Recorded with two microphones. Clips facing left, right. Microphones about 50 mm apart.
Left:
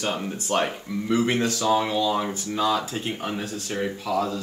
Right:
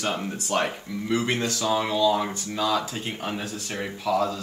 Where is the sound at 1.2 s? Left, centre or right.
Left.